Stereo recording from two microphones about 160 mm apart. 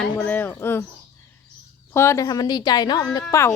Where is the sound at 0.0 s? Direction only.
10° left (ahead or behind).